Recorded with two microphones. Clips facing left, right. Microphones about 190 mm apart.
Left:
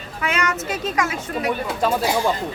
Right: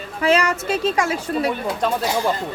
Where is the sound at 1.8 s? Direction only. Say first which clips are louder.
Left 3 dB; 5° left (ahead or behind).